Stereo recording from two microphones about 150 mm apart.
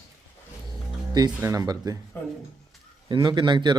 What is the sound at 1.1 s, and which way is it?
Speech, 25° right (ahead or behind).